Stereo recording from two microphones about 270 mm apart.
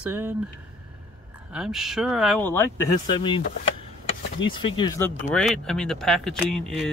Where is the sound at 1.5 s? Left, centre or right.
Centre.